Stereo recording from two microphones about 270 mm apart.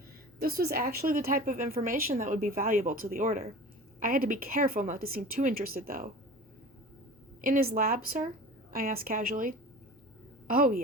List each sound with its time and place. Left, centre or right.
0.3 s a woman's voice: right
7.4 s a woman's voice: right